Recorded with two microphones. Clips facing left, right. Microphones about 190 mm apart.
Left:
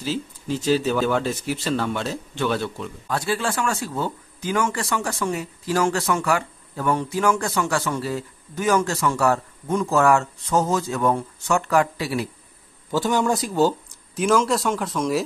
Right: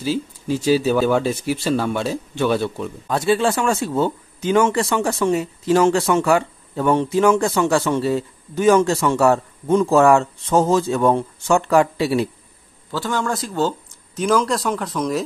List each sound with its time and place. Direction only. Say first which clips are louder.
0.0 s speech: right 5 dB; 10° right (ahead or behind); by 12.3 s 25° right (ahead or behind)
12.9 s speech: left 2 dB; 15° left (ahead or behind)